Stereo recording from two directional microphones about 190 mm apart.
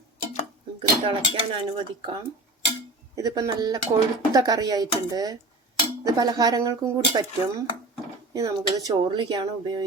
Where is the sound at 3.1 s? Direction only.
20° right (ahead or behind).